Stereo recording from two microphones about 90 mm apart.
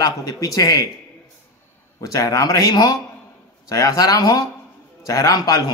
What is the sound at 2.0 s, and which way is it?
A man's voice, 40° left (ahead or behind).